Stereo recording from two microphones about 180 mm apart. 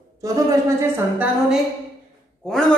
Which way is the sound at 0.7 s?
10° right (ahead or behind).